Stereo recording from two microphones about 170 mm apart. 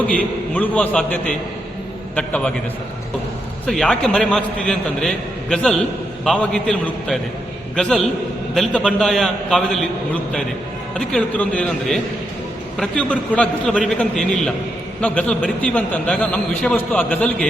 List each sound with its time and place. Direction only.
0.1 s a man's voice: 10° left (ahead or behind)
3.7 s a man's voice: 5° left (ahead or behind)
10.9 s a man's voice: 5° left (ahead or behind)